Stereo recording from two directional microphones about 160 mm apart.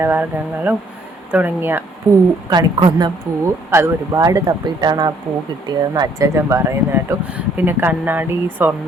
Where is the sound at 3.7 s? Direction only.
20° right (ahead or behind).